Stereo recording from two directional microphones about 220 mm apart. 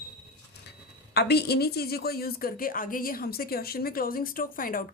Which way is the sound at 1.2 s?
45° left (ahead or behind).